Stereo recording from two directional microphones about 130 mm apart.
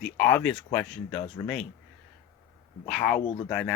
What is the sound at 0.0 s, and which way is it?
Speech, 10° left (ahead or behind).